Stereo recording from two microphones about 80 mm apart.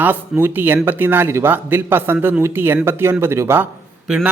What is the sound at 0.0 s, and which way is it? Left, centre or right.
Speech, right.